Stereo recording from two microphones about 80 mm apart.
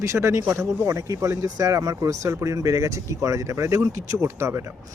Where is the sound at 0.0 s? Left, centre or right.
Right.